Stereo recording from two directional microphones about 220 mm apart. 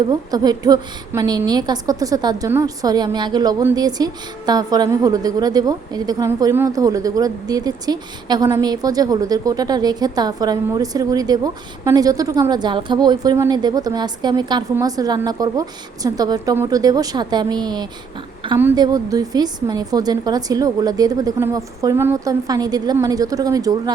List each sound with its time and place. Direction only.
0.1 s a woman's voice: 20° right (ahead or behind)